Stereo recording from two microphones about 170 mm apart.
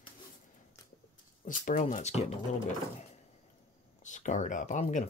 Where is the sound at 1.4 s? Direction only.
50° left (ahead or behind).